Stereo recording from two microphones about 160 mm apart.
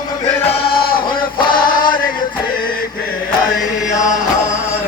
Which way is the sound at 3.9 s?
20° left (ahead or behind).